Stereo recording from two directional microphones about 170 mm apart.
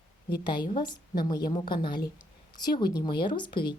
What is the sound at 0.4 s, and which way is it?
Speech, 25° left (ahead or behind).